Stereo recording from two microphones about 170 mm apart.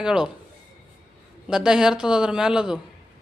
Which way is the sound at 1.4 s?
5° right (ahead or behind).